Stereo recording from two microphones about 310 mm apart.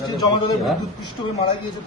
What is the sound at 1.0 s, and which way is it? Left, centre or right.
Speech, centre.